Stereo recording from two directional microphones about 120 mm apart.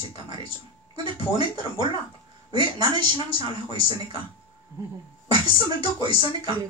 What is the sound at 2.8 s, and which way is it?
Speech, 50° left (ahead or behind).